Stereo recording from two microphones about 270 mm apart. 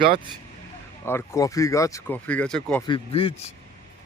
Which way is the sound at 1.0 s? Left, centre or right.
Centre.